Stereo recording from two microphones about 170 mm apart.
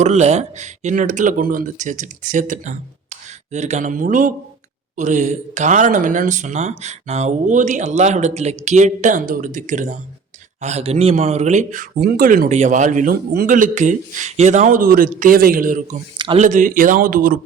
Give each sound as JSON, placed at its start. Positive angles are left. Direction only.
{"t": 0.0, "sound": "a man's voice", "side_deg": -40}
{"t": 16.1, "sound": "speech", "side_deg": -30}
{"t": 16.4, "sound": "a man's voice", "side_deg": -50}